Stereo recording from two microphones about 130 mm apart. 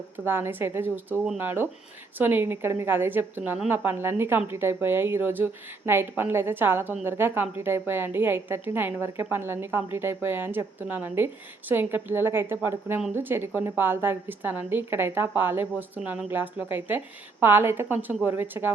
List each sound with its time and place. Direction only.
0.3 s a woman's voice: 15° right (ahead or behind)